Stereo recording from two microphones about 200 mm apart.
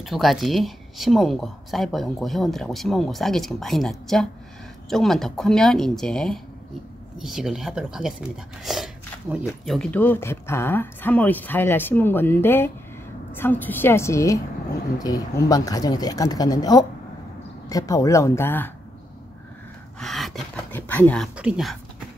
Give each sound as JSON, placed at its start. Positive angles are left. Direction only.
{"t": 0.0, "sound": "speech", "side_deg": 0}
{"t": 20.0, "sound": "a sound", "side_deg": 0}
{"t": 21.4, "sound": "speech", "side_deg": -5}